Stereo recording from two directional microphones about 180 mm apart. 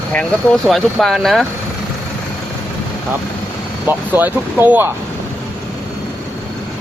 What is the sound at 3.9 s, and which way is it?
Speech, 10° right (ahead or behind).